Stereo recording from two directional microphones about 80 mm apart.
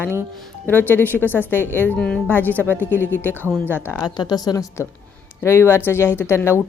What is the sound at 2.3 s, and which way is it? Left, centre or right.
Speech, left.